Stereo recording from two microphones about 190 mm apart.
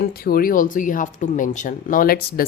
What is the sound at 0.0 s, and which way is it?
Speech, 55° left (ahead or behind).